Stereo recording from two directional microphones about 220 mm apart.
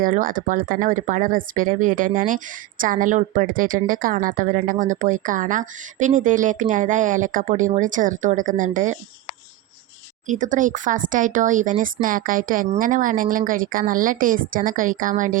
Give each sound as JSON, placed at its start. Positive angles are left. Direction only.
{"t": 0.0, "sound": "speech", "side_deg": -40}
{"t": 10.2, "sound": "speech", "side_deg": -35}